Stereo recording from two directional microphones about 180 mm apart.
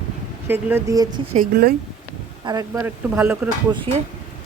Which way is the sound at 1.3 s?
55° right (ahead or behind).